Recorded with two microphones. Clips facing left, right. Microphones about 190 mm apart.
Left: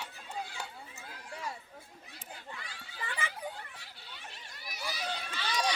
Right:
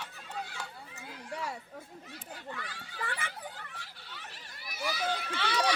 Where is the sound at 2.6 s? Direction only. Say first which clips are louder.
Right 4 dB; 60° right (ahead or behind).